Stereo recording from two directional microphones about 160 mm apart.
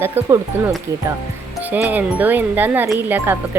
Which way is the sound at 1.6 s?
10° right (ahead or behind).